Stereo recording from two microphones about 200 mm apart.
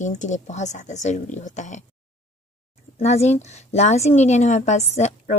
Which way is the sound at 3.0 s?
35° left (ahead or behind).